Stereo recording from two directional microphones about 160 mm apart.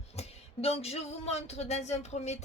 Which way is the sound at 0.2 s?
40° left (ahead or behind).